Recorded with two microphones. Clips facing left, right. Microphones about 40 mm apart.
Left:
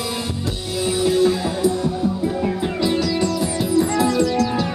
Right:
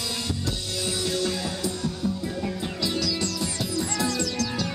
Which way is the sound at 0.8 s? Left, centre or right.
Centre.